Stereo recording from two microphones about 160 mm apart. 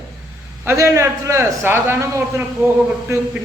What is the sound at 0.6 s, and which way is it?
A man's voice, 15° right (ahead or behind).